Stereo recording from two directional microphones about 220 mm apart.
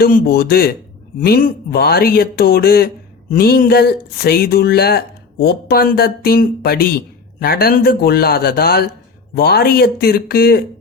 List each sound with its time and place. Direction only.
0.0 s speech: 45° left (ahead or behind)